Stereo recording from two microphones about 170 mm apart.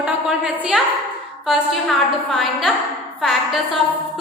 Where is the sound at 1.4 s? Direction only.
Centre (ahead or behind).